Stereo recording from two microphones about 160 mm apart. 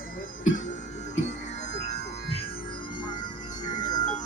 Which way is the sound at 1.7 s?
45° left (ahead or behind).